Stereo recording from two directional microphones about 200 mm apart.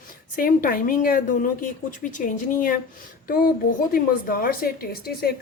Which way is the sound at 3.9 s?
45° left (ahead or behind).